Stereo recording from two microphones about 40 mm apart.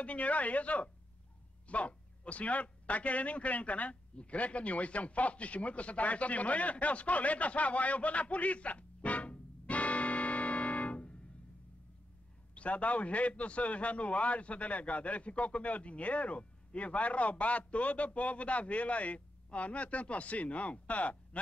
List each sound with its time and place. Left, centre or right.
0.0 s a man's voice: left
3.9 s a man's voice: left
12.5 s a man's voice: left